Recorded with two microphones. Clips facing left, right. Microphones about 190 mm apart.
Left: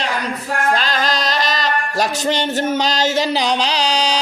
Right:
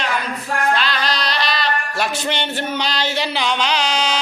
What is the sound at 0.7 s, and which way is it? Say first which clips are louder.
Music: left 3 dB; 45° left (ahead or behind).